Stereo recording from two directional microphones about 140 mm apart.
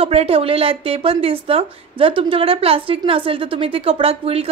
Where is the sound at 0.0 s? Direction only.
45° right (ahead or behind).